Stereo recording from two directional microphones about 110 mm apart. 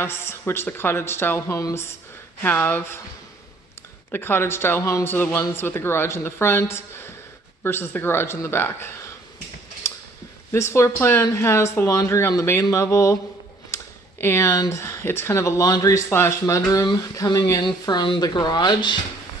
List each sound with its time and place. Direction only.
0.0 s speech: 20° left (ahead or behind)
4.1 s speech: 20° left (ahead or behind)
10.5 s speech: 25° left (ahead or behind); by 18.9 s 45° left (ahead or behind)